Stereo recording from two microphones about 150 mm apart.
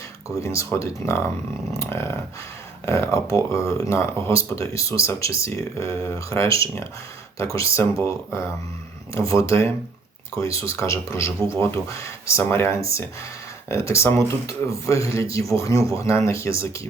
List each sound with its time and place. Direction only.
0.3 s speech: 20° left (ahead or behind)
1.7 s a sound: 20° left (ahead or behind)
2.8 s speech: 20° left (ahead or behind)